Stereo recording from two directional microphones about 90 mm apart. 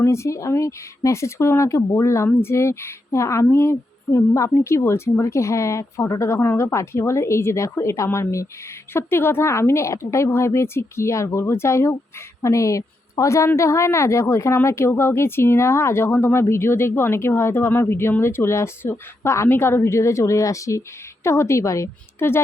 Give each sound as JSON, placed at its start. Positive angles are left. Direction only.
{"t": 0.0, "sound": "a woman's voice", "side_deg": 30}